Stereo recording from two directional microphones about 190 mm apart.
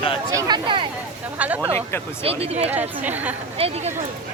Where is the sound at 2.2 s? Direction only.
30° right (ahead or behind).